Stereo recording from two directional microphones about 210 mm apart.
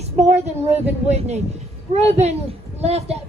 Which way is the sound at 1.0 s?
30° right (ahead or behind).